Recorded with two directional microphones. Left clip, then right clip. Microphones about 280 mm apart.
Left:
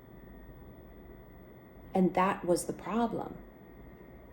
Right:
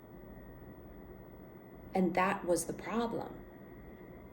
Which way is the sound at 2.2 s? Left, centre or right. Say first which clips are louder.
Left 2 dB; centre.